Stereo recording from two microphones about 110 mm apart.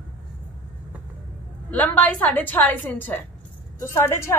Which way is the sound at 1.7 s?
15° left (ahead or behind).